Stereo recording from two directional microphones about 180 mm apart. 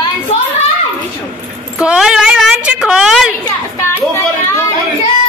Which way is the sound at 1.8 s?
5° right (ahead or behind).